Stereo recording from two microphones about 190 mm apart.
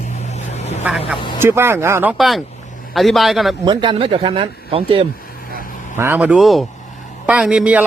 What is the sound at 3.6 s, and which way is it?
Speech, 25° right (ahead or behind).